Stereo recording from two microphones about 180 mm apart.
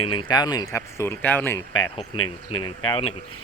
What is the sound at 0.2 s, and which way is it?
Speech, 25° left (ahead or behind).